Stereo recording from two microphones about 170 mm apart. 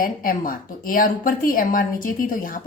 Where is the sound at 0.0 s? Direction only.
55° left (ahead or behind).